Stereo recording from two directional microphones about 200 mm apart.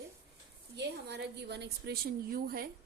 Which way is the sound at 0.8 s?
60° right (ahead or behind).